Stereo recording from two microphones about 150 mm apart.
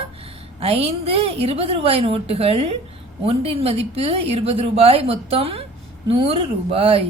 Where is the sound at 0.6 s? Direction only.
40° right (ahead or behind).